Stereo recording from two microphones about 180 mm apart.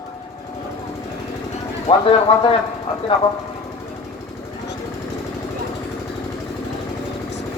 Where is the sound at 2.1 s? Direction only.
30° left (ahead or behind).